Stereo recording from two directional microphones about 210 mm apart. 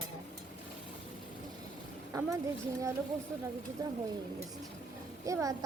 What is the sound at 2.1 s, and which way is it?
Speech, 15° right (ahead or behind).